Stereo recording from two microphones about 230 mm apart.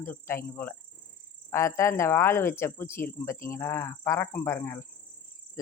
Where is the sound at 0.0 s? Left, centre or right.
Centre.